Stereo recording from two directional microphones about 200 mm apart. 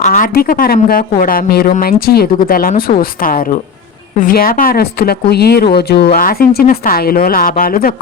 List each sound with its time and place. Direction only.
0.0 s speech: 45° left (ahead or behind)